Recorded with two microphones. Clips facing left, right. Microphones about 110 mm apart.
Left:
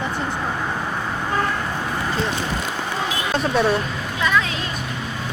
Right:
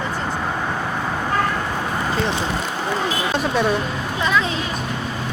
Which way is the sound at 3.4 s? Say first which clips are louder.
Left 2 dB; centre (ahead or behind).